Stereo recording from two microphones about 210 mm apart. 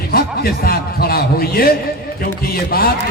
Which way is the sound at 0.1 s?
45° left (ahead or behind).